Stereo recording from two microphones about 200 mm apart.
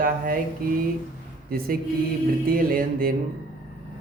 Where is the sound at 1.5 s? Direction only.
50° right (ahead or behind).